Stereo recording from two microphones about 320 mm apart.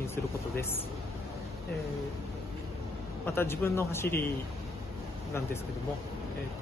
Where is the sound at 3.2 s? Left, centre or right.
Centre.